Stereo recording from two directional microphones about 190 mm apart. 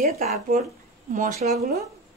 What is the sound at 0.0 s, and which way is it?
Speech, 50° right (ahead or behind).